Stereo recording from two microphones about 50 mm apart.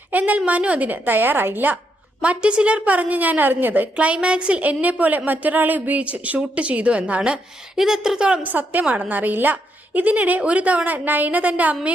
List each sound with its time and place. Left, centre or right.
0.1 s a woman's voice: right
2.2 s a woman's voice: right
7.8 s a woman's voice: centre
8.4 s a woman's voice: right